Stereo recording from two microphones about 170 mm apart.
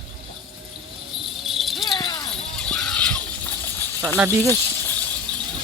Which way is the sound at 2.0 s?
25° left (ahead or behind).